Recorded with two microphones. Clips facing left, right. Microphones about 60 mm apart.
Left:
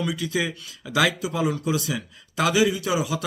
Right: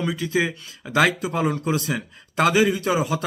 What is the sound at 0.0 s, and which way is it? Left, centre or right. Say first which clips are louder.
Speech: right 3 dB; right.